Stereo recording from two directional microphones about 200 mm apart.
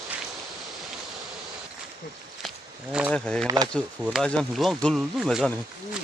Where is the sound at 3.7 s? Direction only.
Centre (ahead or behind).